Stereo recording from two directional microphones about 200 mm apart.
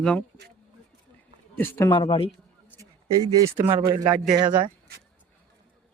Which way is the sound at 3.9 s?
20° right (ahead or behind).